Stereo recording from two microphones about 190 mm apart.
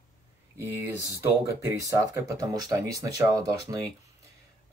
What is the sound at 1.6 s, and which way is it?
Speech, 15° right (ahead or behind).